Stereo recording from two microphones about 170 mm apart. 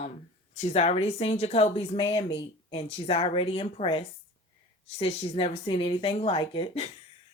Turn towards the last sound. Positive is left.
turn(degrees=35)  # may be behind; listen again after turning